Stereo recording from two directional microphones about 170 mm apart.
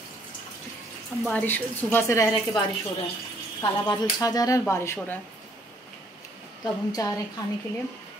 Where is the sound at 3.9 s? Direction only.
20° left (ahead or behind).